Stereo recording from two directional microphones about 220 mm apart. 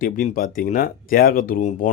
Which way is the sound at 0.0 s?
35° left (ahead or behind).